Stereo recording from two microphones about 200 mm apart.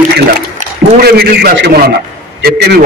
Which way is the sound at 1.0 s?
50° right (ahead or behind).